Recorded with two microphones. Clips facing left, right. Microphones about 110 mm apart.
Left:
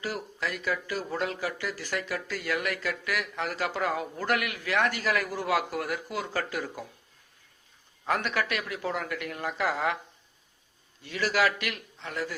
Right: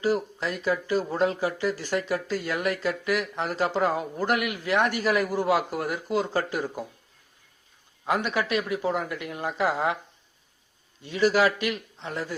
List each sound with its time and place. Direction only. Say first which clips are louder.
0.0 s speech: right 8 dB; 25° right (ahead or behind)
8.0 s speech: right 3 dB; 15° right (ahead or behind)
11.0 s speech: right 5 dB; 20° right (ahead or behind)